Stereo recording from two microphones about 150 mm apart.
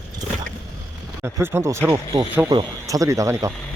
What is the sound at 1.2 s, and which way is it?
Speech, 15° right (ahead or behind).